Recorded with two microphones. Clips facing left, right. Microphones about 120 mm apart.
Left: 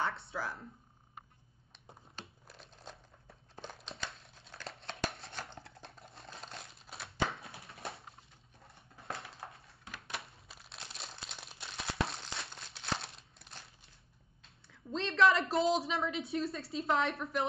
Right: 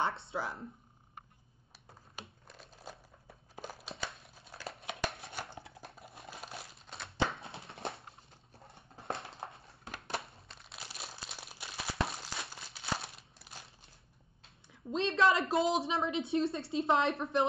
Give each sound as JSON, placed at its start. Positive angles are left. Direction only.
{"t": 0.0, "sound": "speech", "side_deg": -25}
{"t": 2.4, "sound": "crumpling", "side_deg": 0}
{"t": 7.2, "sound": "a sound", "side_deg": -25}
{"t": 10.5, "sound": "crumpling", "side_deg": 0}
{"t": 14.7, "sound": "a woman's voice", "side_deg": -20}